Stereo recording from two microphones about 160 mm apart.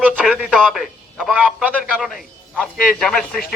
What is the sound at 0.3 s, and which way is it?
Speech, 5° right (ahead or behind).